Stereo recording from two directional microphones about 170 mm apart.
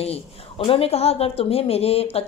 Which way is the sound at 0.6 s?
35° left (ahead or behind).